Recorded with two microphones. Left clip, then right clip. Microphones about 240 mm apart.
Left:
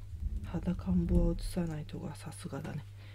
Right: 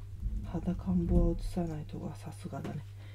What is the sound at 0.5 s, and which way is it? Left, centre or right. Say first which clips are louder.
Speech: right 1 dB; left.